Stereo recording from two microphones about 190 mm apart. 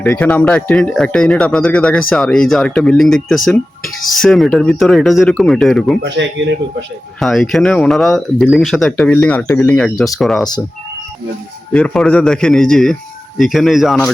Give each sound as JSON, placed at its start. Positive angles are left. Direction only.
{"t": 0.0, "sound": "speech", "side_deg": 10}
{"t": 6.0, "sound": "speech", "side_deg": -70}
{"t": 7.2, "sound": "speech", "side_deg": 0}
{"t": 11.7, "sound": "speech", "side_deg": 5}